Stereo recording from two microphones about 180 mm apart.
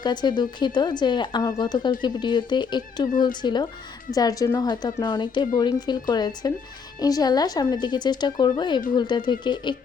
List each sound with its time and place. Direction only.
0.0 s speech: 25° left (ahead or behind)